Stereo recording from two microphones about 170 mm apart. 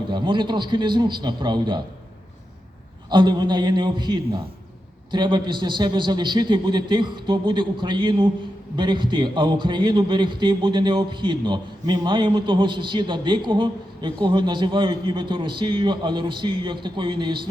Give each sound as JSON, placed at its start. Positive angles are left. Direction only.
{"t": 0.1, "sound": "a man's voice", "side_deg": -25}
{"t": 3.1, "sound": "a man's voice", "side_deg": -25}